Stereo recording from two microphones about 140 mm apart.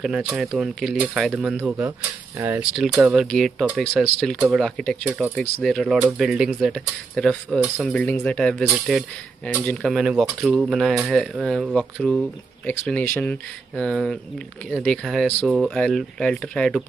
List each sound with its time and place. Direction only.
0.0 s speech: 5° right (ahead or behind)
1.3 s speech: 10° right (ahead or behind)
2.7 s speech: 5° right (ahead or behind)
9.9 s speech: 5° right (ahead or behind)